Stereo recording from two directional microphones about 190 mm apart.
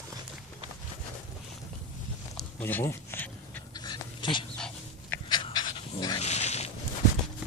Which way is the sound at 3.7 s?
20° left (ahead or behind).